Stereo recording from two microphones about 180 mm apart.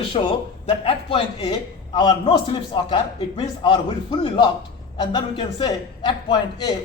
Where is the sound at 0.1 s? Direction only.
30° left (ahead or behind).